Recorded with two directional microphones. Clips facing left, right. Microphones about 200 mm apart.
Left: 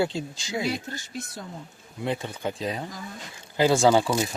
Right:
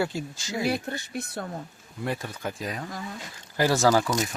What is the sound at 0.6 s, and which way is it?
Speech, 60° right (ahead or behind).